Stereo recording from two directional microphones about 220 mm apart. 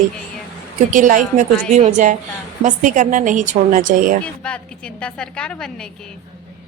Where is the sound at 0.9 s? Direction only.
35° right (ahead or behind).